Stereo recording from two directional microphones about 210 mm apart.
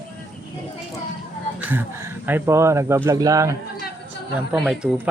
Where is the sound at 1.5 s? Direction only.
10° right (ahead or behind).